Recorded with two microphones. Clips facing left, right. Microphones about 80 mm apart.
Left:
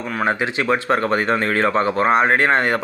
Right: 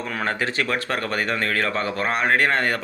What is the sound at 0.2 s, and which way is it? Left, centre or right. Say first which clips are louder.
Speech: left 5 dB; centre.